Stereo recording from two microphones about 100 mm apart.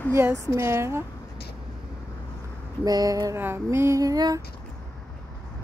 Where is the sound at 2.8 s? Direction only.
40° right (ahead or behind).